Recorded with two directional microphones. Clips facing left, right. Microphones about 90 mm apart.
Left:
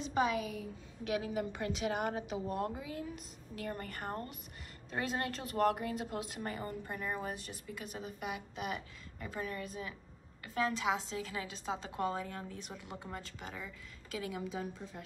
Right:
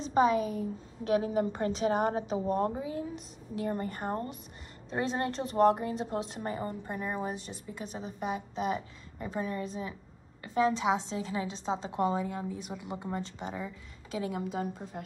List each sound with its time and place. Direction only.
0.0 s a woman's voice: 35° right (ahead or behind)
14.3 s a woman's voice: 55° right (ahead or behind)